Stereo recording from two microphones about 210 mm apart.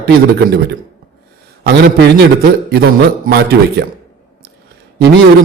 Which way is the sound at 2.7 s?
45° right (ahead or behind).